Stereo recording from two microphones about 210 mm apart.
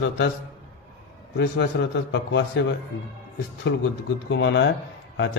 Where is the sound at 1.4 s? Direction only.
55° left (ahead or behind).